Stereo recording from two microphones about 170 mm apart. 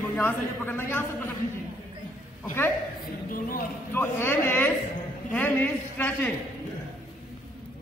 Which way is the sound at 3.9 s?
15° left (ahead or behind).